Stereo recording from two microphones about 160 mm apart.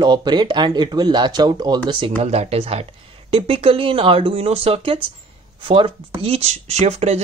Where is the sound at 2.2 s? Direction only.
40° right (ahead or behind).